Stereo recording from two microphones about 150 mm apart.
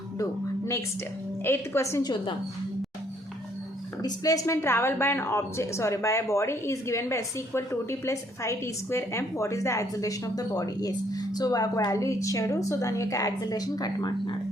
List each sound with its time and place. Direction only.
0.2 s a woman's voice: 20° left (ahead or behind)
4.0 s a woman's voice: 25° left (ahead or behind)